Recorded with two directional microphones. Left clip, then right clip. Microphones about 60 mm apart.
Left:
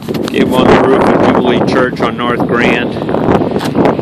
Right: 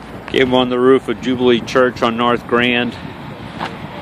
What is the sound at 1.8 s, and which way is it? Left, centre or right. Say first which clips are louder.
Speech: left 2 dB; centre.